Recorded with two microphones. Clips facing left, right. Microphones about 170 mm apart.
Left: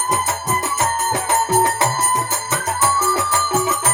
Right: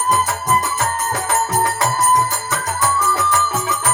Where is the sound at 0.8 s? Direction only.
25° left (ahead or behind).